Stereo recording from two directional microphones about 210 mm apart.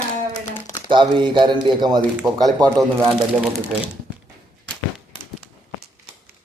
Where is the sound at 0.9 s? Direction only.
20° right (ahead or behind).